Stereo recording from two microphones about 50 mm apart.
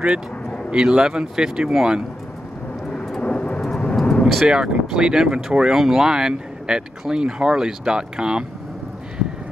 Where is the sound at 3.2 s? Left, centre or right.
Left.